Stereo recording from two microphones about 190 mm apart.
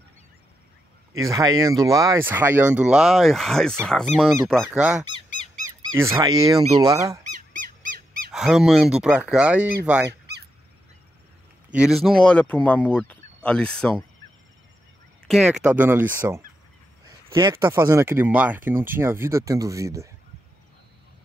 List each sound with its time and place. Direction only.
1.1 s speech: 15° right (ahead or behind)
5.9 s speech: 15° right (ahead or behind)
7.8 s squeak: 45° right (ahead or behind)
8.3 s speech: centre (ahead or behind)
10.0 s honk: 60° right (ahead or behind)
11.7 s speech: 5° right (ahead or behind)
15.2 s speech: centre (ahead or behind)